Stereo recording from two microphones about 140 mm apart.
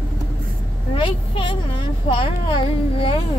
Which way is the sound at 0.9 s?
40° left (ahead or behind).